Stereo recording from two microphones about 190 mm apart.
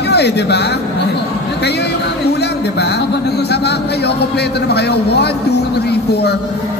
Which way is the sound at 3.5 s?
60° left (ahead or behind).